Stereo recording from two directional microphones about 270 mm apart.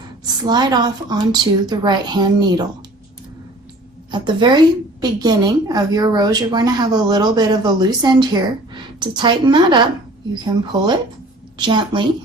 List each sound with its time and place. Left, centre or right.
0.4 s a woman's voice: centre
4.1 s a woman's voice: centre